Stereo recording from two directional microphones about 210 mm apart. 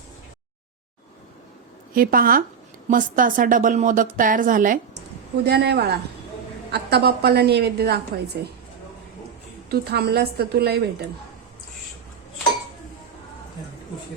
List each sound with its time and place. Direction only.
1.9 s a woman's voice: 45° right (ahead or behind)
5.4 s a woman's voice: 50° right (ahead or behind)
9.6 s a woman's voice: 50° right (ahead or behind)